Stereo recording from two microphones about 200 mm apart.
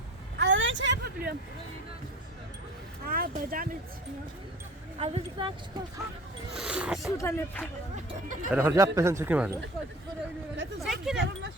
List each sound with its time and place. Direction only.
0.3 s a sound: 65° right (ahead or behind)
3.1 s speech: 45° right (ahead or behind)
4.9 s speech: 30° right (ahead or behind)
6.6 s speech: 5° right (ahead or behind)
7.2 s speech: 10° left (ahead or behind)
8.4 s speech: 10° right (ahead or behind)
10.8 s speech: centre (ahead or behind)
11.2 s speech: 65° right (ahead or behind)